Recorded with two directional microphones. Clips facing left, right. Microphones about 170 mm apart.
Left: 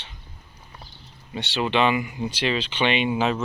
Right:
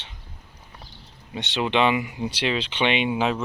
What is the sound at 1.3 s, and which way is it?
Speech, 20° right (ahead or behind).